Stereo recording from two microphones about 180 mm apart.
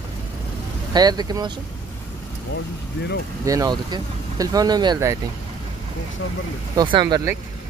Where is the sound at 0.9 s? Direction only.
20° right (ahead or behind).